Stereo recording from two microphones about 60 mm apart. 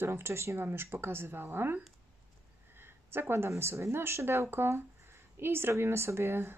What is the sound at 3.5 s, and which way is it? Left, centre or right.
Speech, right.